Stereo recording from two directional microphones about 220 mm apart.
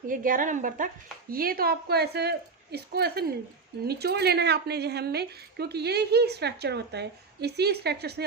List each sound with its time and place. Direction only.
0.1 s a woman's voice: 40° right (ahead or behind)